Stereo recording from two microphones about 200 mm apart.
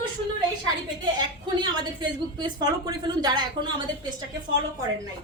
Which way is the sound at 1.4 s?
20° right (ahead or behind).